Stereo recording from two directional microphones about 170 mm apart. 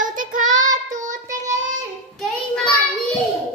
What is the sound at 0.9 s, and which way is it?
Child singing, 45° right (ahead or behind).